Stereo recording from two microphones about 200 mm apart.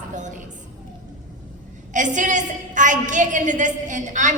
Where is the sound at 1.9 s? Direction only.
40° right (ahead or behind).